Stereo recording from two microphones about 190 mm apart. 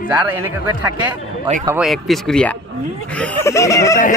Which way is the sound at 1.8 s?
Centre (ahead or behind).